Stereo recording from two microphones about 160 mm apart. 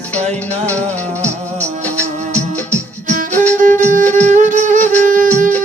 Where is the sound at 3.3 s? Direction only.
10° left (ahead or behind).